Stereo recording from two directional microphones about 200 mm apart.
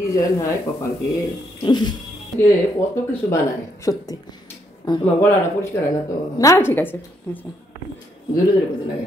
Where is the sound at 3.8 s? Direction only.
15° left (ahead or behind).